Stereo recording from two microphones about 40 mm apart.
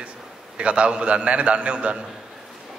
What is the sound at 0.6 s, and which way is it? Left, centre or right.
A man's voice, right.